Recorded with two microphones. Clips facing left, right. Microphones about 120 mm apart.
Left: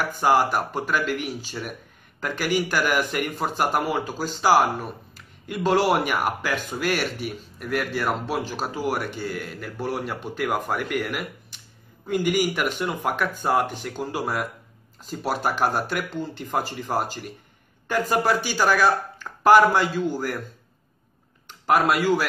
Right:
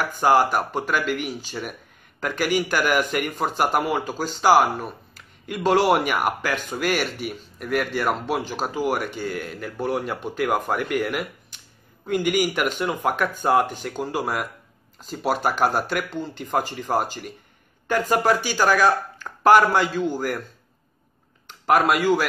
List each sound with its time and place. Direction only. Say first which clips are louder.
0.0 s speech: right 2 dB; centre (ahead or behind)
19.4 s speech: even; centre (ahead or behind)
21.5 s speech: right 1 dB; 5° right (ahead or behind)